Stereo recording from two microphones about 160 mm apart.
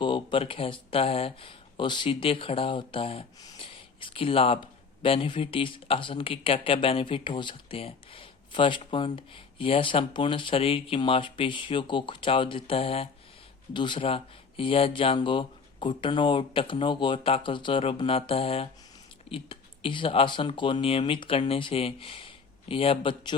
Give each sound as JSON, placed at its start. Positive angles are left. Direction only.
{"t": 0.0, "sound": "speech", "side_deg": 30}